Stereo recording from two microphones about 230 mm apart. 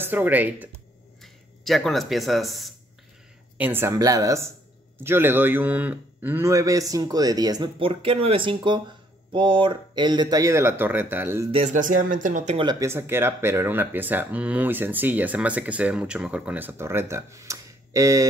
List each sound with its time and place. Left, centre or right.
0.0 s speech: centre
11.5 s speech: right
12.5 s speech: centre